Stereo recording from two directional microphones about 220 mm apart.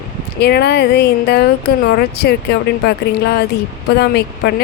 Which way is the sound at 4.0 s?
50° left (ahead or behind).